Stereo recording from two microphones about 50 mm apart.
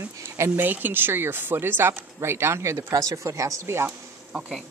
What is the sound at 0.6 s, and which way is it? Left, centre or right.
Speech, right.